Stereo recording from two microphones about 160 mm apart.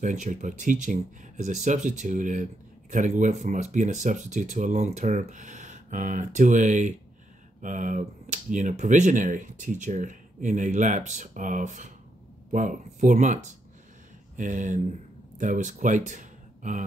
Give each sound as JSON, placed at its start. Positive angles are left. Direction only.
{"t": 0.0, "sound": "speech", "side_deg": -50}